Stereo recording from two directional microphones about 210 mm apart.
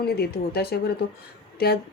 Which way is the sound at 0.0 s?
50° left (ahead or behind).